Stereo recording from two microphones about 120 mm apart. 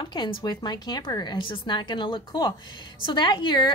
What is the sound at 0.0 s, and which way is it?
A woman's voice, 40° left (ahead or behind).